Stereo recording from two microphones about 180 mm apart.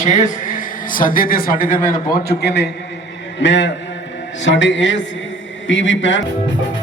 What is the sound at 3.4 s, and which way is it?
A man's voice, 90° left.